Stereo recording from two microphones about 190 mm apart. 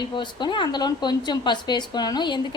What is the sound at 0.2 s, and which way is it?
Speech, 25° left (ahead or behind).